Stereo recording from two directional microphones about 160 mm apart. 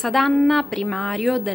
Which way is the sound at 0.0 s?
Centre (ahead or behind).